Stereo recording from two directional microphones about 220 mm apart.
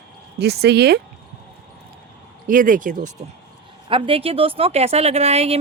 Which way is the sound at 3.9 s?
25° right (ahead or behind).